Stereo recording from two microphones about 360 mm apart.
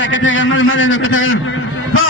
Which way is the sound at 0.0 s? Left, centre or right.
Left.